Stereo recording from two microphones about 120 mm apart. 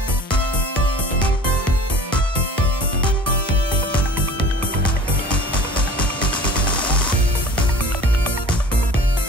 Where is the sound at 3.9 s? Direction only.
10° left (ahead or behind).